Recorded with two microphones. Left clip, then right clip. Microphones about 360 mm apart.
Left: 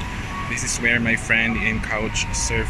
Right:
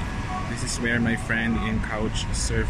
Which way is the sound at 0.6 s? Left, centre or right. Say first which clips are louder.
Left 6 dB; centre.